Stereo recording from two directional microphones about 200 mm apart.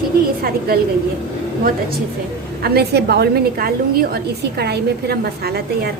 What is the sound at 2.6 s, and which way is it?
A woman's voice, 55° right (ahead or behind).